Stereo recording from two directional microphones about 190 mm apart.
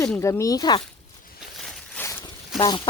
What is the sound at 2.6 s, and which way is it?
Speech, 25° left (ahead or behind).